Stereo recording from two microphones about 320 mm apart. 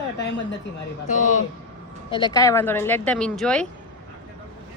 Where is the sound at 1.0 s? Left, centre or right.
Left; by 3.7 s centre.